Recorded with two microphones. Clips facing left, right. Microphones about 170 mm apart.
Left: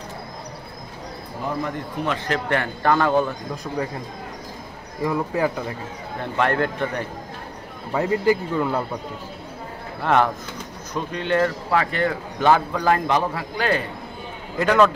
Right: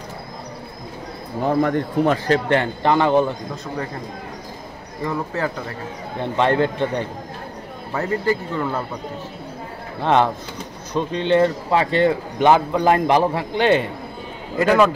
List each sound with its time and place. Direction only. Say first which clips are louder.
1.5 s speech: right 9 dB; 50° right (ahead or behind)
2.2 s speech: right 5 dB; 30° right (ahead or behind)
5.0 s speech: left 2 dB; 10° left (ahead or behind)
6.3 s speech: right 3 dB; 20° right (ahead or behind)
7.9 s speech: left 2 dB; 10° left (ahead or behind)
10.0 s speech: right 2 dB; 20° right (ahead or behind)
14.6 s a man's voice: right 2 dB; 5° right (ahead or behind)